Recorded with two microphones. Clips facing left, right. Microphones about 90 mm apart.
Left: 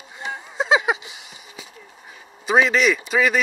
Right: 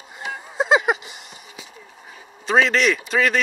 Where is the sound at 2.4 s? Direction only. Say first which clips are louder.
Even; 5° left (ahead or behind).